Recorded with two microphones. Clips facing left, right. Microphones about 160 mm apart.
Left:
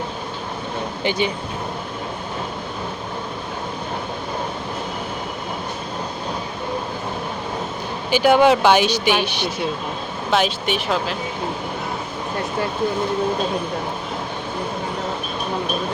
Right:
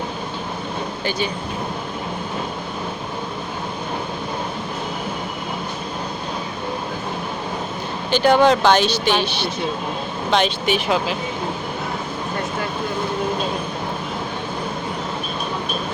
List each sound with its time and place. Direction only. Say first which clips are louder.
8.1 s speech: even; 10° left (ahead or behind)
10.3 s speech: right 1 dB; centre (ahead or behind)